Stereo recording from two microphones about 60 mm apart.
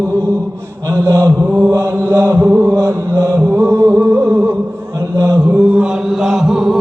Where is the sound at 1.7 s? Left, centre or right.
Right.